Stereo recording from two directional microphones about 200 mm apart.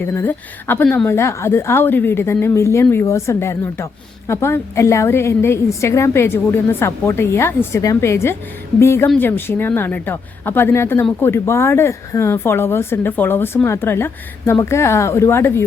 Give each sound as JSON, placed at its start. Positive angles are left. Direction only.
{"t": 0.0, "sound": "a woman's voice", "side_deg": 10}